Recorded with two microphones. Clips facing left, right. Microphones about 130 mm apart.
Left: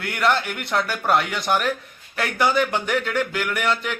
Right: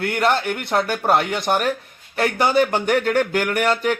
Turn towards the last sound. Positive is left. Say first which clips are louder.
# right 5 dB
turn(degrees=-45)  # may be behind; listen again after turning